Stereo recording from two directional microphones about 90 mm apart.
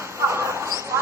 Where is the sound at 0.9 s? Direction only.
30° right (ahead or behind).